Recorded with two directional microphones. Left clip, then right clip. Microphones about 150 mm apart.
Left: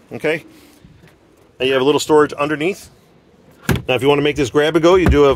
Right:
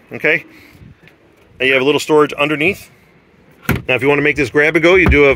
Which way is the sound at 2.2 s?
10° right (ahead or behind).